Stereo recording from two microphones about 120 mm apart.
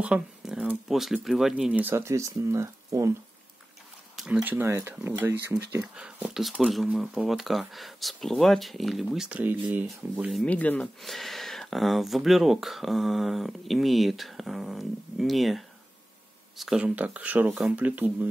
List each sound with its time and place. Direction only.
0.0 s speech: 10° right (ahead or behind); by 3.1 s 25° right (ahead or behind)
4.2 s speech: 10° right (ahead or behind)
9.4 s speech: 15° right (ahead or behind)
10.3 s speech: 10° left (ahead or behind)
11.0 s speech: centre (ahead or behind); by 18.3 s 15° right (ahead or behind)